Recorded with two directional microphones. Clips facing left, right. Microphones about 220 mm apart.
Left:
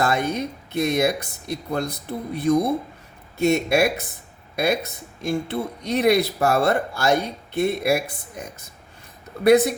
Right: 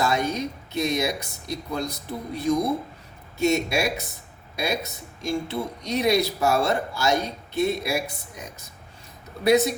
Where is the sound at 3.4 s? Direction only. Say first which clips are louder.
Left 4 dB; 55° left (ahead or behind).